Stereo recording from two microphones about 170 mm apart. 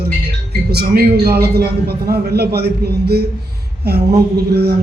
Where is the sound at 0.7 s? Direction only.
65° right (ahead or behind).